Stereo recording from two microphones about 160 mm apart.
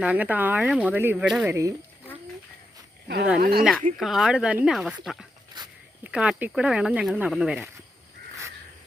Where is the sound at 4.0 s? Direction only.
Centre (ahead or behind).